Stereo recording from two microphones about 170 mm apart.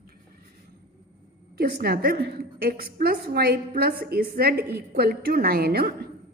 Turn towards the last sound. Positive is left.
turn(degrees=-65)  # may be behind; listen again after turning